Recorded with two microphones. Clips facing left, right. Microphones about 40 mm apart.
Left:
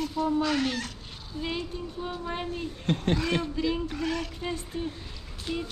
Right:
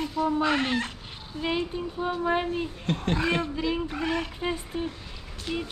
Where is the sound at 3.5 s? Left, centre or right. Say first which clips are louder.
Even; centre.